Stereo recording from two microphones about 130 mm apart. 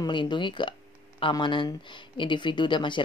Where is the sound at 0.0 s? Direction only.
35° left (ahead or behind).